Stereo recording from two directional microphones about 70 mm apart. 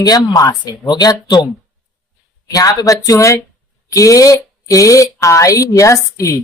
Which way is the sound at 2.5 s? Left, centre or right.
Left.